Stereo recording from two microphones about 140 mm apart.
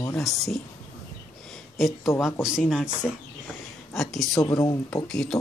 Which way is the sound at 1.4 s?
Centre (ahead or behind).